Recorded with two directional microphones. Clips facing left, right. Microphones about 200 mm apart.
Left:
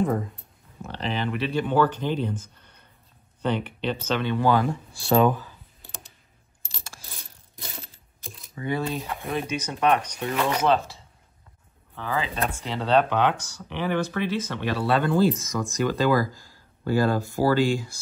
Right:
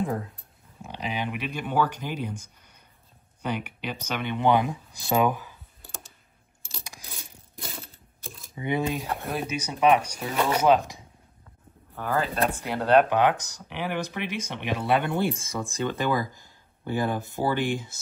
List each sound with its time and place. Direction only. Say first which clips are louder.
0.0 s speech: left 4 dB; centre (ahead or behind)
0.8 s speech: left 3 dB; 10° right (ahead or behind)
6.8 s coin: even; 15° right (ahead or behind)
7.2 s a sound: right 3 dB; centre (ahead or behind)
8.5 s speech: right 1 dB; 15° right (ahead or behind)
9.2 s speech: left 2 dB; 5° right (ahead or behind); by 17.9 s 20° right (ahead or behind)